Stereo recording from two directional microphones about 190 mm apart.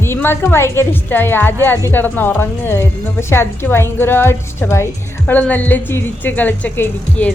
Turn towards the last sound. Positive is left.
turn(degrees=10)  # may be behind; listen again after turning